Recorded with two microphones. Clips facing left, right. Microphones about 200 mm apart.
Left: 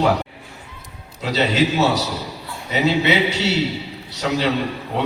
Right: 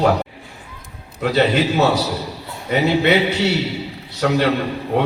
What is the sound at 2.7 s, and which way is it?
A man's voice, 55° right (ahead or behind).